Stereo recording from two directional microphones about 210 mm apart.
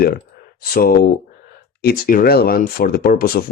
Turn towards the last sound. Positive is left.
turn(degrees=45)  # may be behind; listen again after turning